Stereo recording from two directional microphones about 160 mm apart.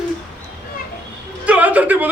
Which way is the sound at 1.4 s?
10° right (ahead or behind).